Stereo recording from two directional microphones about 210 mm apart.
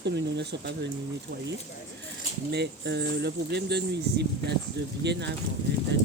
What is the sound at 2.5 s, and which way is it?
Speech, 55° right (ahead or behind).